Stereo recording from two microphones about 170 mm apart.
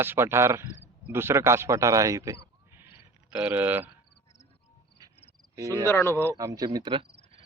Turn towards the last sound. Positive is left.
turn(degrees=-30)  # may be behind; listen again after turning